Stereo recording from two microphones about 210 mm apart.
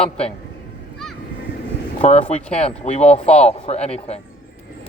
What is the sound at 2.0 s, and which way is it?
Speech, 30° left (ahead or behind).